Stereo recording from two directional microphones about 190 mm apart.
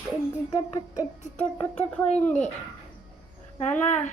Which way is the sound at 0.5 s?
20° left (ahead or behind).